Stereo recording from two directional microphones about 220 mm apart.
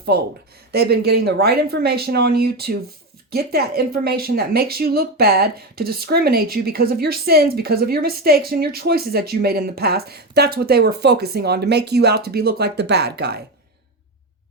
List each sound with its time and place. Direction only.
0.1 s a woman's voice: 45° right (ahead or behind)